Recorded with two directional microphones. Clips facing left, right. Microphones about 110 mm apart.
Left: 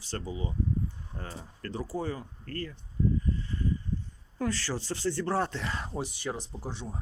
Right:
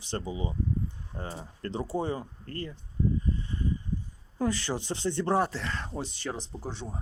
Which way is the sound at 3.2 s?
20° right (ahead or behind).